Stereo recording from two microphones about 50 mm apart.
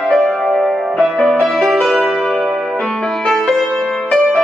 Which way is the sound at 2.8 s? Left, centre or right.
Centre.